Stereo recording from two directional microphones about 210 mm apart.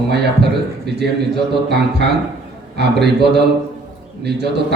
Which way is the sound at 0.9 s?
50° right (ahead or behind).